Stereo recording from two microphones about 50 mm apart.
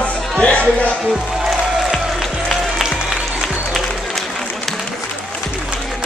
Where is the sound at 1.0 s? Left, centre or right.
Centre.